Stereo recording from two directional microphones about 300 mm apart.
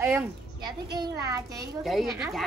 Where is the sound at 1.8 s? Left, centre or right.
Centre.